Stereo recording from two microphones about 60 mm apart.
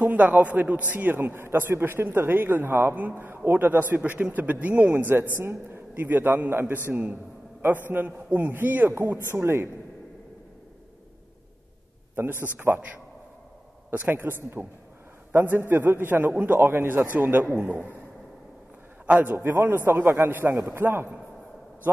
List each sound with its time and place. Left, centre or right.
0.0 s a man's voice: right
12.2 s a man's voice: right
19.3 s a man's voice: right